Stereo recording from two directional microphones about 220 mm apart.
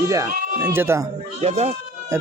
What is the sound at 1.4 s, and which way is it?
Speech, 30° right (ahead or behind).